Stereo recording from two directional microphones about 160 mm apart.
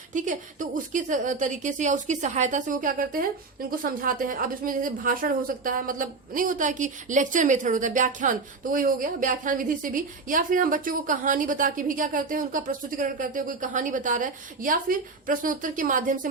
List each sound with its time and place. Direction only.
0.1 s a woman's voice: 50° right (ahead or behind)